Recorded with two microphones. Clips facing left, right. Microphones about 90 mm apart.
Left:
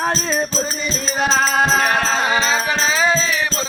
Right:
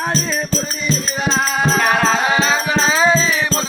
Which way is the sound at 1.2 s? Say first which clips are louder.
Left 3 dB; 50° left (ahead or behind).